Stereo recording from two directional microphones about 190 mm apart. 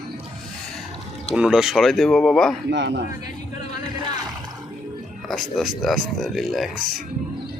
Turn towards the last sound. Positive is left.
turn(degrees=0)  # may be behind; listen again after turning